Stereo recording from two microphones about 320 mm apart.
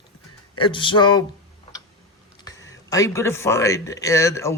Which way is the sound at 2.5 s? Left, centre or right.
Centre.